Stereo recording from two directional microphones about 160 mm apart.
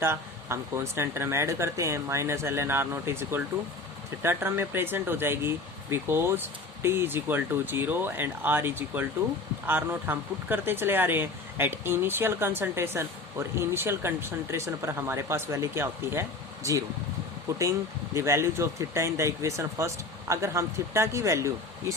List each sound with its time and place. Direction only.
0.0 s speech: 15° right (ahead or behind)
17.6 s speech: 20° right (ahead or behind)